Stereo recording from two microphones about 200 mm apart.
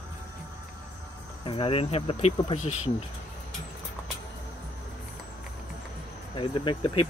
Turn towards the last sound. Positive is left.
turn(degrees=25)  # may be behind; listen again after turning